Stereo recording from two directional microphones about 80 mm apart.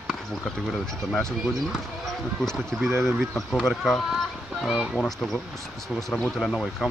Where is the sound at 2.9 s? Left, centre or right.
Right.